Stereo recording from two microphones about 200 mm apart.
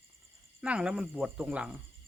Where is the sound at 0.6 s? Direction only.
5° right (ahead or behind).